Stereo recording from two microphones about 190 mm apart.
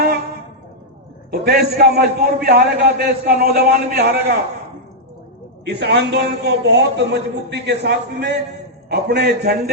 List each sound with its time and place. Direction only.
1.3 s a man's voice: 55° right (ahead or behind)
5.6 s a man's voice: 60° right (ahead or behind)